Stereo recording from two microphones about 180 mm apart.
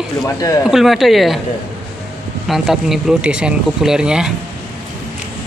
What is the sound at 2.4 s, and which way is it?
Speech, centre (ahead or behind).